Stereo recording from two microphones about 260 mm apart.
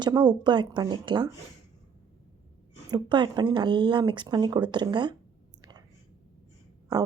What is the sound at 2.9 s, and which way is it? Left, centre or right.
Speech, centre.